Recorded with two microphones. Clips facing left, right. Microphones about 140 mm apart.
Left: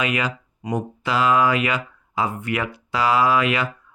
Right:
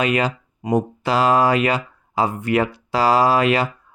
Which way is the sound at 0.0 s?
35° right (ahead or behind).